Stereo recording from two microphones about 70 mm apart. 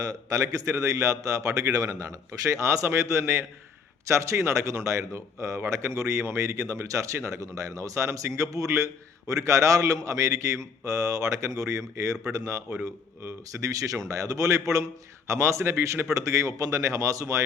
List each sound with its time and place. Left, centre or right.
0.0 s a man's voice: right
13.7 s a man's voice: right